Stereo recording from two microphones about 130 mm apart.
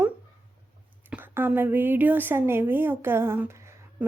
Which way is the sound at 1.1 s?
15° right (ahead or behind).